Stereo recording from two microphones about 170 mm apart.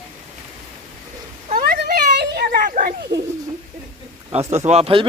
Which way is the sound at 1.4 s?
55° right (ahead or behind).